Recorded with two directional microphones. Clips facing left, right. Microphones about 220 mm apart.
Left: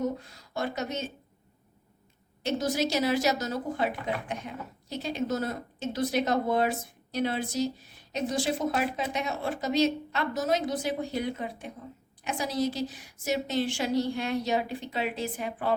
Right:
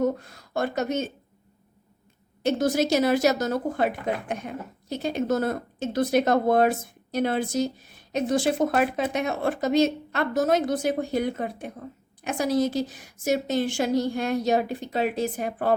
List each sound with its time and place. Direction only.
0.0 s speech: 50° right (ahead or behind)
2.4 s speech: 50° right (ahead or behind)